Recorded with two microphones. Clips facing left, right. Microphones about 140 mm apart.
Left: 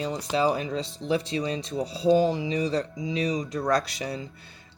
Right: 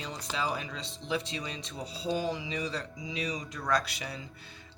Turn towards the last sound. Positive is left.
turn(degrees=35)  # may be behind; listen again after turning